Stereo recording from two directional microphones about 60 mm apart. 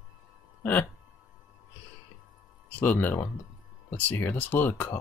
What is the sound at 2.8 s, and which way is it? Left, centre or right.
Speech, left.